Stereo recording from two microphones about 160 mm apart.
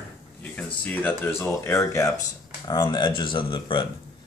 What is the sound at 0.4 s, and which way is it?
Speech, 10° left (ahead or behind).